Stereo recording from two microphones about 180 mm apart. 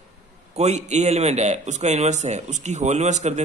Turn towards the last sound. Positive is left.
turn(degrees=-40)  # may be behind; listen again after turning